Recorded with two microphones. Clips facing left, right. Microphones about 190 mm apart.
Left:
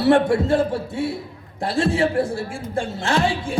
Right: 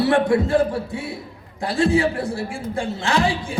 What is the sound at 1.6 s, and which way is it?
A man's voice, 25° left (ahead or behind).